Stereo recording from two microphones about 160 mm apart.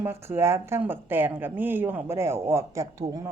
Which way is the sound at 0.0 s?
15° right (ahead or behind).